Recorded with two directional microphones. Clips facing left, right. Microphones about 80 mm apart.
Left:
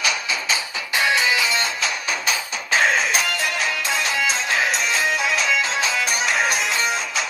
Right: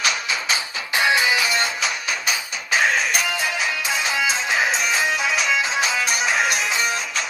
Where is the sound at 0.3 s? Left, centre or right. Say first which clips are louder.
Even; right.